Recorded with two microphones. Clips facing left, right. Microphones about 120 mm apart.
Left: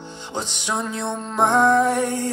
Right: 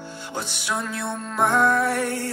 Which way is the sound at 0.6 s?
15° left (ahead or behind).